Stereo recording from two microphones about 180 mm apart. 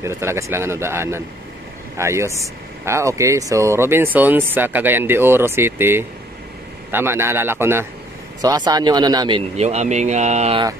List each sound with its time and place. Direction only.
0.0 s speech: 15° right (ahead or behind)
9.6 s speech: 40° right (ahead or behind)